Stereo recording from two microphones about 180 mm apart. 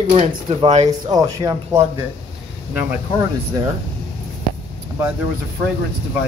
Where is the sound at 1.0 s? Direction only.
20° right (ahead or behind).